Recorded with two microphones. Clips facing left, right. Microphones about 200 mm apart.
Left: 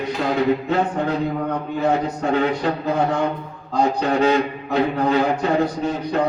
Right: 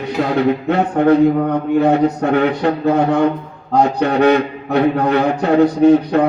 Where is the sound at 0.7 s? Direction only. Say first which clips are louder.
Right 8 dB; 65° right (ahead or behind).